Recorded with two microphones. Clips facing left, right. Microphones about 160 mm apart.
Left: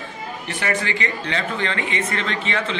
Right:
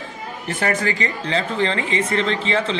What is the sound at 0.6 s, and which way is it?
Speech, 40° right (ahead or behind).